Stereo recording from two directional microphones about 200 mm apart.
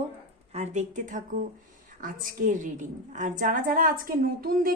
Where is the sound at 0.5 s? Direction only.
35° right (ahead or behind).